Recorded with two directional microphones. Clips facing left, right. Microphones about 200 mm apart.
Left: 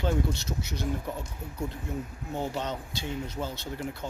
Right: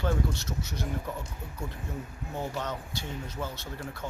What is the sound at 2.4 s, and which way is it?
Speech, 20° left (ahead or behind).